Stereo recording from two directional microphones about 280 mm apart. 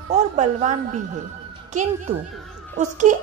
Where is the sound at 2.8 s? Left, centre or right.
Right.